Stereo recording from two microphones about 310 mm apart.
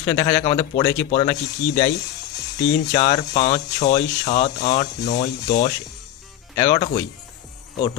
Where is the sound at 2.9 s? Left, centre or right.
Centre.